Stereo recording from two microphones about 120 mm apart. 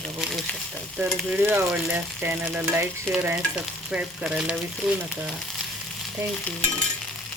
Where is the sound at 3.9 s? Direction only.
5° right (ahead or behind).